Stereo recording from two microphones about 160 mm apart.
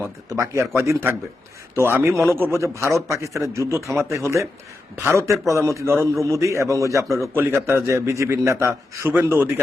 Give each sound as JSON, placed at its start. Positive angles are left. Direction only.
{"t": 0.3, "sound": "a man's voice", "side_deg": -20}